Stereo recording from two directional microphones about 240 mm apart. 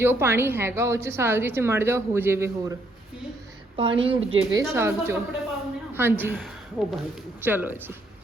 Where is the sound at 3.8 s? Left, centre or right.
Right.